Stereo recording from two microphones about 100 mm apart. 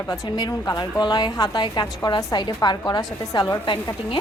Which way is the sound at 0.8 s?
45° left (ahead or behind).